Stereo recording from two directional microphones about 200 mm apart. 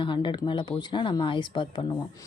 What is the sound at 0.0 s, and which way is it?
A woman's voice, 25° left (ahead or behind).